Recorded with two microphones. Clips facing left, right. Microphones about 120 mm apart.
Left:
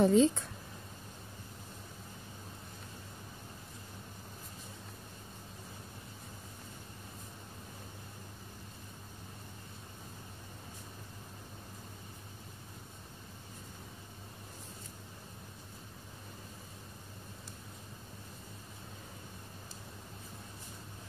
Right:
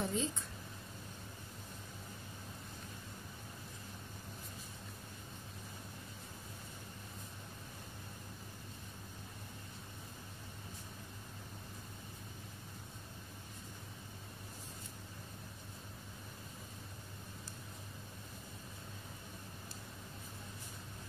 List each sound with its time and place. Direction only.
0.0 s speech: 80° left